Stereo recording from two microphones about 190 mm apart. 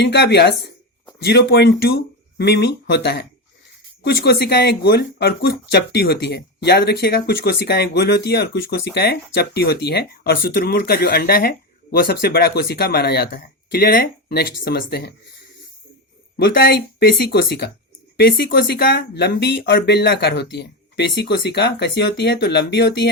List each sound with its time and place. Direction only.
0.0 s speech: 60° left (ahead or behind)
16.4 s speech: 55° left (ahead or behind)